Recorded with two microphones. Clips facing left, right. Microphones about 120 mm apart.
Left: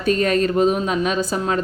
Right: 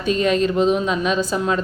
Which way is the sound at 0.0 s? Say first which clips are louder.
Even; 50° left (ahead or behind).